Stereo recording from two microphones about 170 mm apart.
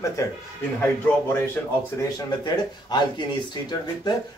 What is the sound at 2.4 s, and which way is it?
Speech, 25° left (ahead or behind).